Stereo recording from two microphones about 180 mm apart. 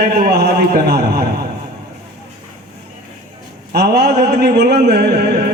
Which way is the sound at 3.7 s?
65° right (ahead or behind).